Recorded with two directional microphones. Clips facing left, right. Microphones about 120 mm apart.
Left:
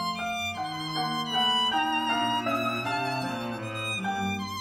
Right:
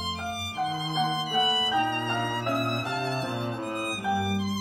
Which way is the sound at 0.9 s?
10° right (ahead or behind).